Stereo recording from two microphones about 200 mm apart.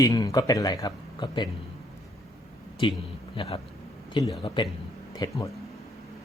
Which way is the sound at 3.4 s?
30° left (ahead or behind).